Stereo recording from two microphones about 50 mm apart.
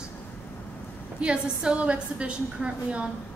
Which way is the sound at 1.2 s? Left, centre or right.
Centre.